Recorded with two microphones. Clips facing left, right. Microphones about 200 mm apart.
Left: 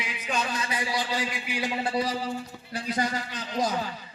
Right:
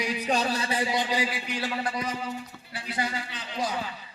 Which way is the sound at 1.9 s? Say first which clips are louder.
Left 4 dB; 35° left (ahead or behind).